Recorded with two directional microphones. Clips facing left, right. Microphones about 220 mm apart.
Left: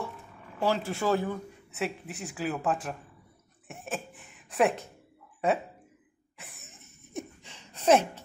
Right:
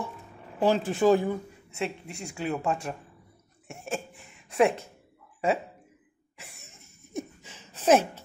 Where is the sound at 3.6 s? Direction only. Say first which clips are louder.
Right 2 dB; centre (ahead or behind).